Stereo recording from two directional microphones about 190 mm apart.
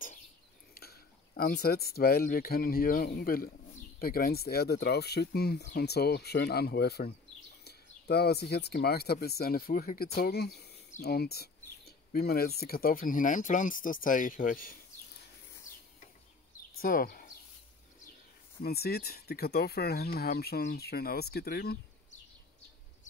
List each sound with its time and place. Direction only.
0.7 s speech: 55° left (ahead or behind)
15.7 s a sound: 15° left (ahead or behind)
16.8 s speech: 50° left (ahead or behind)
18.6 s speech: 55° left (ahead or behind)